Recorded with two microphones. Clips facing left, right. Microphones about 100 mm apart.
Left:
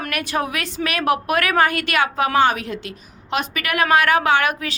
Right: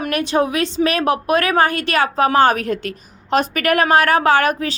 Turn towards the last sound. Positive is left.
turn(degrees=-35)  # may be behind; listen again after turning